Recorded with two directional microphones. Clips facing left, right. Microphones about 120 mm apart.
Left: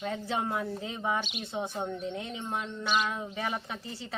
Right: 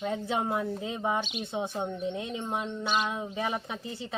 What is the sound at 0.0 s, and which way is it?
Speech, 20° right (ahead or behind).